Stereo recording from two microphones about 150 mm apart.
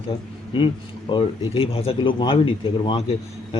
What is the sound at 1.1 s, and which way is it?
Speech, 40° left (ahead or behind).